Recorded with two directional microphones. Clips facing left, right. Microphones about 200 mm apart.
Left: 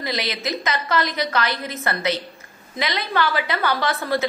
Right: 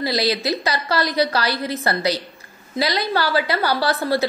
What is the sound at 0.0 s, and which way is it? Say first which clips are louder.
A woman's voice: right 5 dB; 35° right (ahead or behind).